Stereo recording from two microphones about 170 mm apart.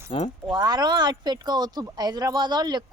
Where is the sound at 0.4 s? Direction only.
25° right (ahead or behind).